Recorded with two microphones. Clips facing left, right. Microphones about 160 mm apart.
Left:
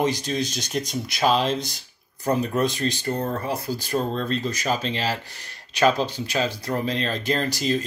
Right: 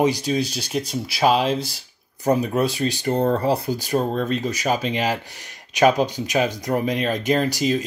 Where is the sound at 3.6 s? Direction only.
15° right (ahead or behind).